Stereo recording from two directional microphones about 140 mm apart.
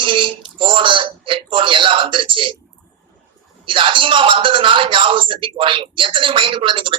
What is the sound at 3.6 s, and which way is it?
Speech, 35° right (ahead or behind).